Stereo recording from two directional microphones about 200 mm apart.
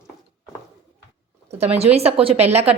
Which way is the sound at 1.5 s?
30° right (ahead or behind).